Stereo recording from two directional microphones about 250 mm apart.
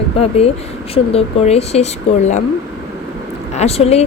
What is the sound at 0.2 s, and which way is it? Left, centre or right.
A woman's voice, left.